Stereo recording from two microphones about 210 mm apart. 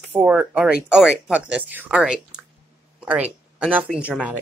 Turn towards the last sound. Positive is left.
turn(degrees=-5)  # may be behind; listen again after turning